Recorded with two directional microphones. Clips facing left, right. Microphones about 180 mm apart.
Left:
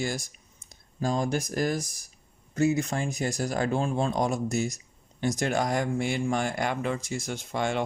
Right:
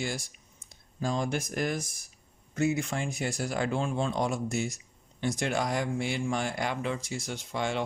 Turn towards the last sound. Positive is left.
turn(degrees=50)  # may be behind; listen again after turning